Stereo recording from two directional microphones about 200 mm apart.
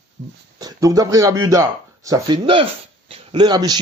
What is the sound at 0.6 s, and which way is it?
Speech, 15° right (ahead or behind).